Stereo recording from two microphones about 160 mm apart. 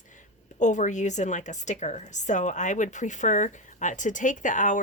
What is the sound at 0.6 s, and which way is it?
A woman's voice, 50° left (ahead or behind).